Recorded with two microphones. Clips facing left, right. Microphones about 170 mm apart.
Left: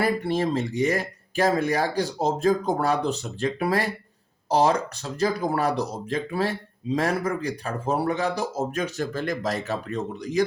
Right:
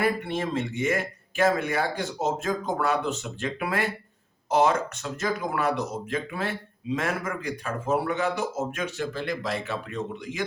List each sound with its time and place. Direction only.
0.0 s speech: 35° left (ahead or behind)